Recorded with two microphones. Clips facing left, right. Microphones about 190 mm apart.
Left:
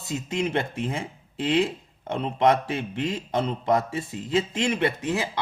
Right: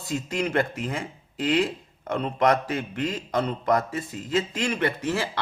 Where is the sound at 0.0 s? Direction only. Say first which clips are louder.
Even; 25° left (ahead or behind).